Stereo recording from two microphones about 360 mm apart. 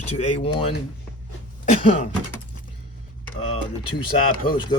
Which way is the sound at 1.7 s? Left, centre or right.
Left.